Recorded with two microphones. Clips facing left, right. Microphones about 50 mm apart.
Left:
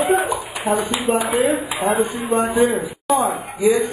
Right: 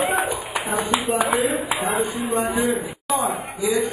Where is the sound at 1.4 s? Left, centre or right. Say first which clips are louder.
Left 3 dB; left.